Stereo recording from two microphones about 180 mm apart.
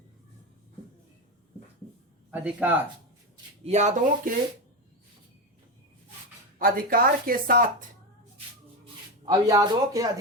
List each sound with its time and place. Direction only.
2.3 s speech: 10° right (ahead or behind)
3.6 s speech: 40° right (ahead or behind)
6.6 s speech: 55° right (ahead or behind)
9.2 s speech: 20° right (ahead or behind)